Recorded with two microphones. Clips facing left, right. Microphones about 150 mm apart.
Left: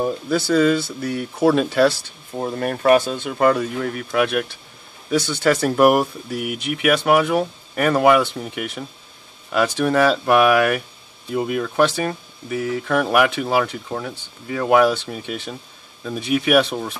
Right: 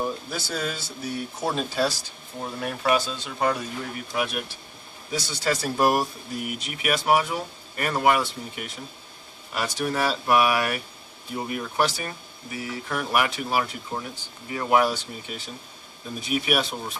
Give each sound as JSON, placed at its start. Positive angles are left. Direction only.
{"t": 0.0, "sound": "speech", "side_deg": 65}
{"t": 2.3, "sound": "speech", "side_deg": 50}
{"t": 11.3, "sound": "speech", "side_deg": 75}